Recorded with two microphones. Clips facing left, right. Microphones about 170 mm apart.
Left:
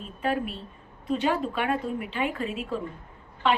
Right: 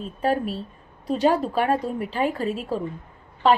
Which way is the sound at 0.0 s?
40° right (ahead or behind).